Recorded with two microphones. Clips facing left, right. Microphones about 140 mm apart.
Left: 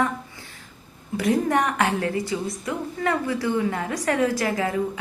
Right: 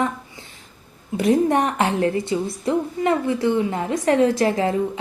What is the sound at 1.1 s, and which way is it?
A woman's voice, 25° right (ahead or behind).